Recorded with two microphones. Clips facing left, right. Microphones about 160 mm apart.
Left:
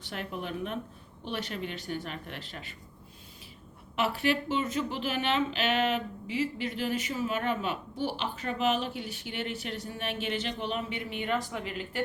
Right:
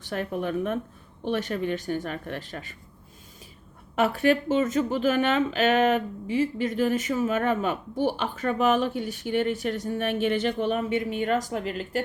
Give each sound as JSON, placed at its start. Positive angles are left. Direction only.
{"t": 0.0, "sound": "speech", "side_deg": -45}
{"t": 3.9, "sound": "speech", "side_deg": -50}